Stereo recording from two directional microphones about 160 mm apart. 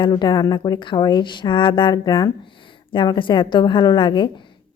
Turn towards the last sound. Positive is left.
turn(degrees=30)  # may be behind; listen again after turning